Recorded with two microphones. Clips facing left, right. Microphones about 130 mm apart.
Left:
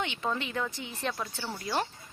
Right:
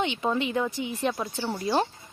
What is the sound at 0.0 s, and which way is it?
Speech, 20° right (ahead or behind).